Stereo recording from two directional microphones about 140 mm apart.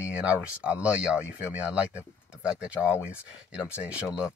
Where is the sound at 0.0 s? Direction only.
10° right (ahead or behind).